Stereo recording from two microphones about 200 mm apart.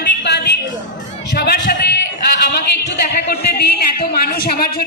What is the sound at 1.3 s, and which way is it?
Speech, 55° left (ahead or behind).